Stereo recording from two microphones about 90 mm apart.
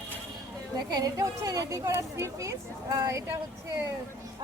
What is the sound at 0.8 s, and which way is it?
Speech, 45° right (ahead or behind).